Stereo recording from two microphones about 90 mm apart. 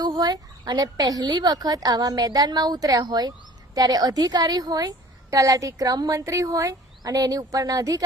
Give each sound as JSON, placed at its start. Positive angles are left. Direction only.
{"t": 0.0, "sound": "a woman's voice", "side_deg": -50}